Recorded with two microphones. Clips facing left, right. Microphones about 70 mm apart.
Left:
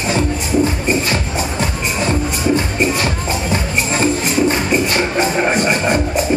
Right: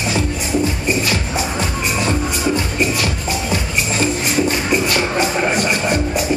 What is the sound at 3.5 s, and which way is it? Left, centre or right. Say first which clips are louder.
Music: left 3 dB; left.